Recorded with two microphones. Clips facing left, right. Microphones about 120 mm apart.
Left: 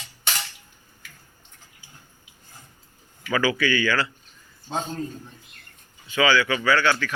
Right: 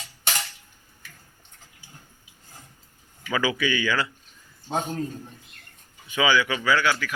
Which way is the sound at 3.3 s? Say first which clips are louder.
Left 2 dB; 20° right (ahead or behind).